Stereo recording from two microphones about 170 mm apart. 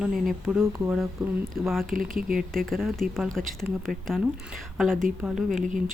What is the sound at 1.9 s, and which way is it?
Speech, 55° right (ahead or behind).